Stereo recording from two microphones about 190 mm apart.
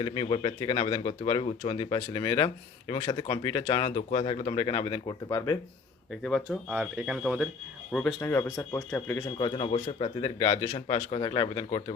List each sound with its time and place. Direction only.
0.0 s speech: 25° left (ahead or behind)
6.2 s speech: centre (ahead or behind)
7.9 s speech: 10° left (ahead or behind)
9.4 s speech: 25° left (ahead or behind)